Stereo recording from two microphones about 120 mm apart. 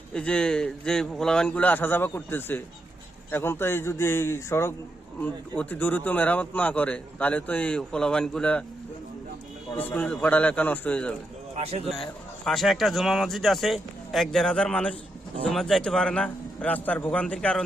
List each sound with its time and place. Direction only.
0.1 s a man's voice: 10° left (ahead or behind)
5.2 s a man's voice: 10° left (ahead or behind)
9.7 s a man's voice: 15° left (ahead or behind)
11.5 s a man's voice: 55° right (ahead or behind)
12.5 s a man's voice: centre (ahead or behind)